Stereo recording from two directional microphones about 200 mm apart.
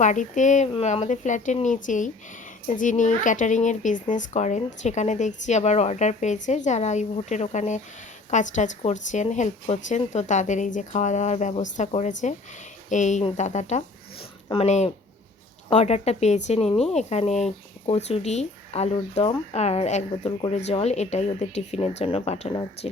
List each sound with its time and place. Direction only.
0.0 s speech: 40° left (ahead or behind)